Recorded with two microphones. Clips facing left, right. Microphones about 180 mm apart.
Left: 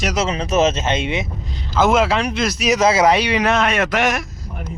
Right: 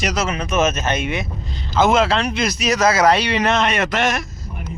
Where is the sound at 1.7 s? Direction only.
5° left (ahead or behind).